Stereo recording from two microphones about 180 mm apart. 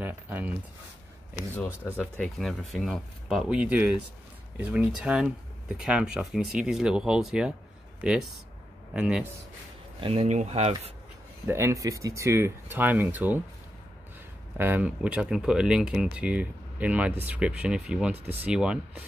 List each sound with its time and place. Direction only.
0.0 s speech: 10° right (ahead or behind)
2.0 s speech: 5° left (ahead or behind)
9.9 s speech: 30° right (ahead or behind)
11.4 s speech: 15° right (ahead or behind)
14.6 s speech: 10° right (ahead or behind)